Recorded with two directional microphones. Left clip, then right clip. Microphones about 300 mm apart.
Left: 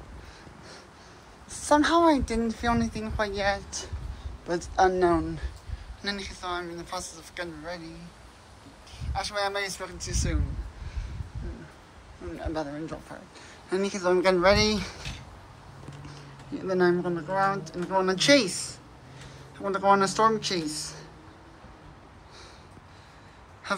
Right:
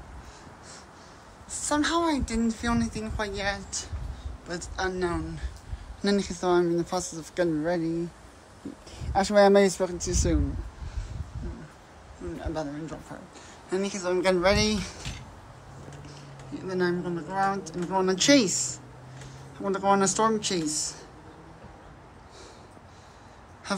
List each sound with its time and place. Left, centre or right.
1.7 s a woman's voice: centre
6.0 s speech: centre
9.1 s speech: right
12.4 s speech: centre
16.1 s speech: centre